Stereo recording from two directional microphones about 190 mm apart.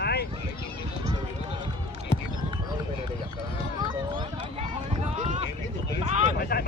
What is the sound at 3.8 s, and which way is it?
Run, 25° right (ahead or behind).